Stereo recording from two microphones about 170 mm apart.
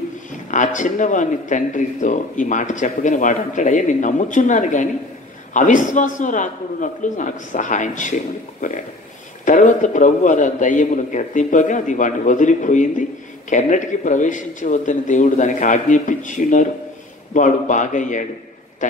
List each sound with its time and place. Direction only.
0.5 s speech: 50° left (ahead or behind)